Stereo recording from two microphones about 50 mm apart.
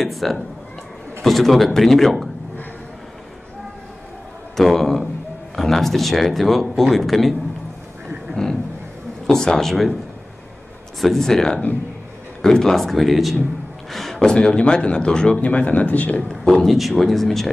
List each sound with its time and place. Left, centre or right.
0.0 s speech: centre
4.6 s speech: centre
9.3 s speech: centre
11.0 s speech: centre
13.8 s a sound: centre
14.3 s speech: centre
16.2 s speech: centre